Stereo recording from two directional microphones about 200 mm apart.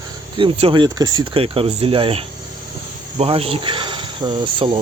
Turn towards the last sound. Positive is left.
turn(degrees=-25)  # may be behind; listen again after turning